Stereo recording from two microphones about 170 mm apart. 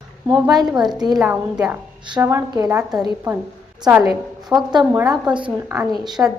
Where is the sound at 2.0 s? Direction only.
20° right (ahead or behind).